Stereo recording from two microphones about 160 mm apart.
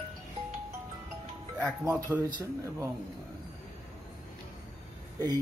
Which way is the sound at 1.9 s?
10° right (ahead or behind).